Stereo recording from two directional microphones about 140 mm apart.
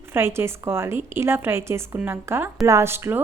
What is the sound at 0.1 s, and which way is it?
A woman's voice, 15° right (ahead or behind).